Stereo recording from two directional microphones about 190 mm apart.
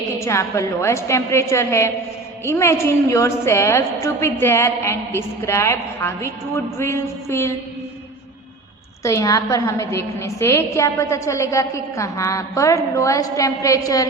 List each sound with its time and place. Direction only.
0.2 s a woman's voice: 15° left (ahead or behind)
9.0 s a woman's voice: 15° left (ahead or behind)